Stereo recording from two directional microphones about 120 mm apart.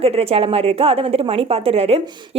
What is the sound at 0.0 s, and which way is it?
A woman's voice, 55° right (ahead or behind).